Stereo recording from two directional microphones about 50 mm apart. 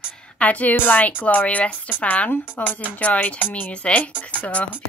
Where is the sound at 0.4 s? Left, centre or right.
Left.